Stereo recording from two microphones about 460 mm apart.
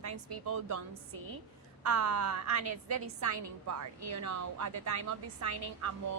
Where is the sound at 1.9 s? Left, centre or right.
Right.